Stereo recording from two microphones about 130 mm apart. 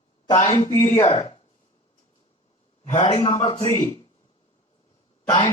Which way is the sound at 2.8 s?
60° left (ahead or behind).